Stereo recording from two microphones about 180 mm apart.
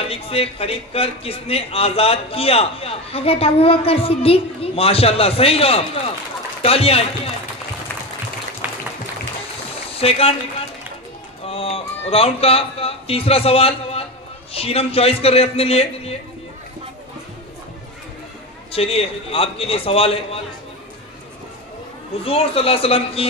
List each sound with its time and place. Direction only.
0.0 s a man's voice: 30° left (ahead or behind)
8.6 s applause: 10° right (ahead or behind)
9.9 s speech: 35° left (ahead or behind)
11.4 s a man's voice: 35° left (ahead or behind)
18.7 s a man's voice: 35° left (ahead or behind)
22.2 s a man's voice: 30° left (ahead or behind)